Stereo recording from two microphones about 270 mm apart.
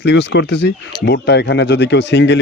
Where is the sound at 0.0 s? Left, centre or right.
Left.